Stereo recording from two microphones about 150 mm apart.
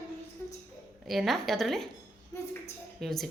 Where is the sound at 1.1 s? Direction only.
Centre (ahead or behind).